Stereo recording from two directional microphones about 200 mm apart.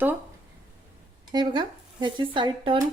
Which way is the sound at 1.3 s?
20° right (ahead or behind).